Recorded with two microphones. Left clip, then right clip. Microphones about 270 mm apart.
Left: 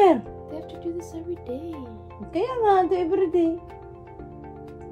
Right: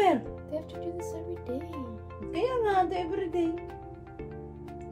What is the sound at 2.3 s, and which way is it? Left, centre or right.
Speech, left.